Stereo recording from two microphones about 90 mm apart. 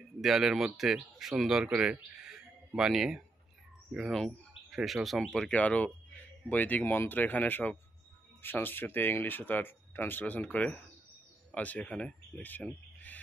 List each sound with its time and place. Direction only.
0.2 s speech: 5° right (ahead or behind); by 13.2 s 20° left (ahead or behind)